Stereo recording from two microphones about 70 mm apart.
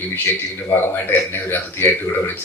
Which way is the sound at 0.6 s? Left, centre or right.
Left.